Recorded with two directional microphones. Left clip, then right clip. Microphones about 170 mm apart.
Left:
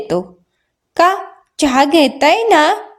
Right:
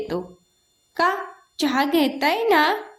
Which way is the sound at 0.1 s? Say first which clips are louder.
Left 10 dB; 40° left (ahead or behind).